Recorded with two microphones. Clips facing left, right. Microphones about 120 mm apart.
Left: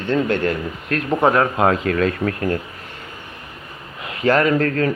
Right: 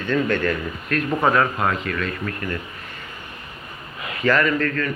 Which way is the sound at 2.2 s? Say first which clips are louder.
Left 7 dB; 65° left (ahead or behind).